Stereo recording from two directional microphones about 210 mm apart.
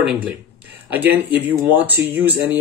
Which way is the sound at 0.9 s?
10° right (ahead or behind).